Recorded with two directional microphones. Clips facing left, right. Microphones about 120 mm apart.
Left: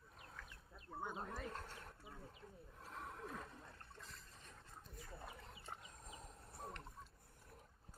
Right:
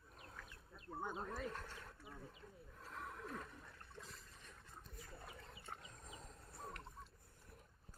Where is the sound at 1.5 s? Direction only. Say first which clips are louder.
Even; 20° left (ahead or behind).